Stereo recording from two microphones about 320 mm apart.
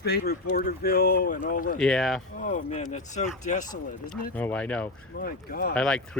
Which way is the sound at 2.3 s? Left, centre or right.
Left.